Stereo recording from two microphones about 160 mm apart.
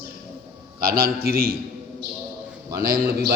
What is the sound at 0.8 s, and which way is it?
Speech, 70° right (ahead or behind).